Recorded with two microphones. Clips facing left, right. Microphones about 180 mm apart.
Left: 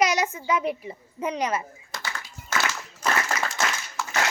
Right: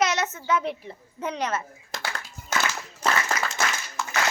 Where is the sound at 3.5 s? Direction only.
20° right (ahead or behind).